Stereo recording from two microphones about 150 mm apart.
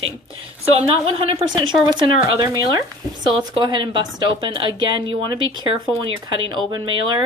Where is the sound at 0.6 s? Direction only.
40° right (ahead or behind).